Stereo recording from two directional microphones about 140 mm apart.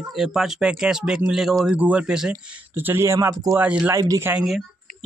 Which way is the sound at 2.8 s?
15° right (ahead or behind).